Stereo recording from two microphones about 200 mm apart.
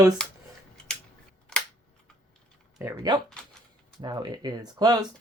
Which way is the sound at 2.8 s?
10° right (ahead or behind).